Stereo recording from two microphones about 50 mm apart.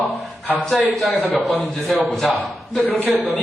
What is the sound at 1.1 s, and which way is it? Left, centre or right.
Speech, left.